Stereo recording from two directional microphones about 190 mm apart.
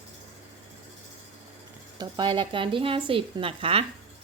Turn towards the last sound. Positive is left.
turn(degrees=-30)  # may be behind; listen again after turning